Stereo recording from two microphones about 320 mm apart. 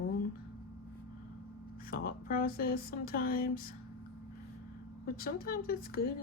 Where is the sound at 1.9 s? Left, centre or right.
Left.